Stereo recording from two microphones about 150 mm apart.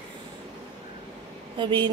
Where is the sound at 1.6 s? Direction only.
30° right (ahead or behind).